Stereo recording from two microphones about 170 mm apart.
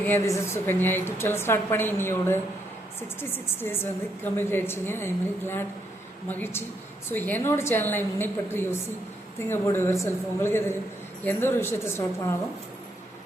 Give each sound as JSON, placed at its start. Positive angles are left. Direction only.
{"t": 0.0, "sound": "a woman's voice", "side_deg": 15}